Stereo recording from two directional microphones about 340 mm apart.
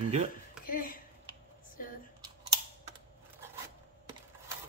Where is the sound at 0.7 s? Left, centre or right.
Left.